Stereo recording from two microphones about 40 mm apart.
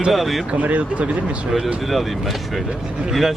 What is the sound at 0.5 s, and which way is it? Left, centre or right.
Speech, right.